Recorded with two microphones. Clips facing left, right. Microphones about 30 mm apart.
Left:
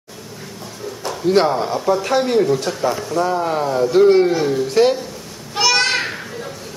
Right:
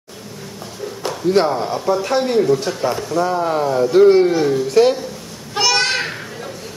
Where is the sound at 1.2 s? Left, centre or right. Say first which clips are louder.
Left 1 dB; centre.